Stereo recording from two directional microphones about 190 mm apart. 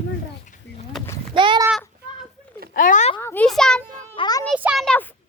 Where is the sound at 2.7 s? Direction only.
45° left (ahead or behind).